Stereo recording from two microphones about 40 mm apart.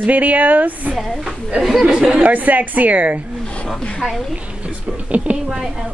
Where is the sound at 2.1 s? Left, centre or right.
Right.